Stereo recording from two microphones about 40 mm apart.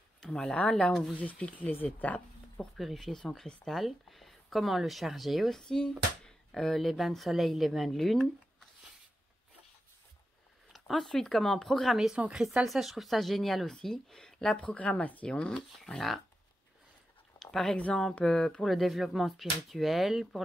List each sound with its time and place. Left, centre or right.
0.2 s speech: centre
0.6 s speech: left
1.1 s speech: left
2.8 s speech: centre
5.6 s speech: centre
10.7 s speech: centre
12.6 s speech: centre
14.6 s speech: left
15.2 s speech: left
15.5 s speech: centre
17.4 s speech: centre
18.7 s speech: centre